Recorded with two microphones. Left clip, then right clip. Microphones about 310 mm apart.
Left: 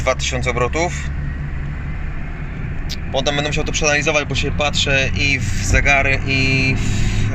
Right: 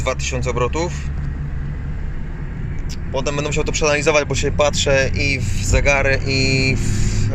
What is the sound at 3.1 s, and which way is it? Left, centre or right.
Speech, centre.